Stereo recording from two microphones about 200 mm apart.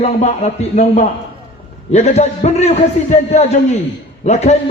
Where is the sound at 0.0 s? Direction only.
35° left (ahead or behind).